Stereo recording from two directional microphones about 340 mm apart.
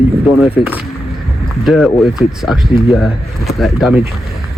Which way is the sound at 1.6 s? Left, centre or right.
Centre.